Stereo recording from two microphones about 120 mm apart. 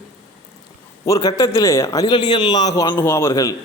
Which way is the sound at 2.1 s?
40° left (ahead or behind).